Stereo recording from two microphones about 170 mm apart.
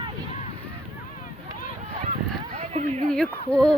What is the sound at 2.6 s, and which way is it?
Speech, 40° right (ahead or behind).